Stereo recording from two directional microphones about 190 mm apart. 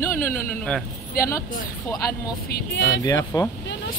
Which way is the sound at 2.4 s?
65° left (ahead or behind).